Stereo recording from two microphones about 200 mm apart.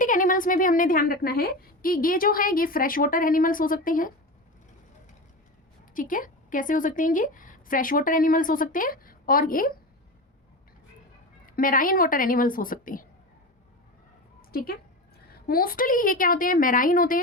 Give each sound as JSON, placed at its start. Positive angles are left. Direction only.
{"t": 0.0, "sound": "a woman's voice", "side_deg": 40}
{"t": 5.9, "sound": "a woman's voice", "side_deg": 40}
{"t": 11.4, "sound": "a woman's voice", "side_deg": 45}
{"t": 14.5, "sound": "a woman's voice", "side_deg": 50}